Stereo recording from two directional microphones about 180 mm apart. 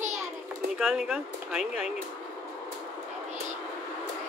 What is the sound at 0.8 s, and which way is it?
Speech, 5° right (ahead or behind).